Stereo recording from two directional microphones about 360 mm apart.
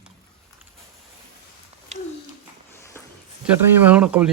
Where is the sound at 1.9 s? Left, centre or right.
Centre.